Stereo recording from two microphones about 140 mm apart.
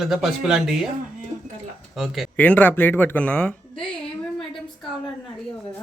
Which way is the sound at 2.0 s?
Centre (ahead or behind).